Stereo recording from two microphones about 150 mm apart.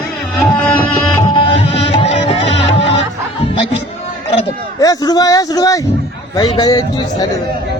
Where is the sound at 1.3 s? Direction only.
40° left (ahead or behind).